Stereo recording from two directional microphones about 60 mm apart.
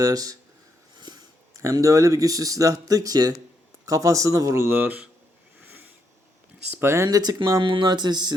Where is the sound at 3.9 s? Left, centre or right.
Right.